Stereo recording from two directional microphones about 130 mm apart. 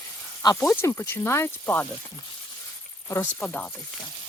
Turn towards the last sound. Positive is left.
turn(degrees=10)  # may be behind; listen again after turning